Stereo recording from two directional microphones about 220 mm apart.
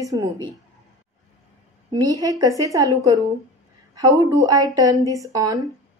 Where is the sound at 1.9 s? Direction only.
15° right (ahead or behind).